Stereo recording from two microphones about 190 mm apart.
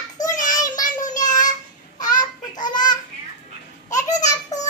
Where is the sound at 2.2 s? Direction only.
20° left (ahead or behind).